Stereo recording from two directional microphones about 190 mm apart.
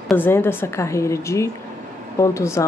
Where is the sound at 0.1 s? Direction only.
10° left (ahead or behind).